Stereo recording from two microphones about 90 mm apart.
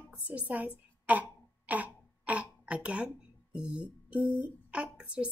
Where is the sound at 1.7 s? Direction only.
20° right (ahead or behind).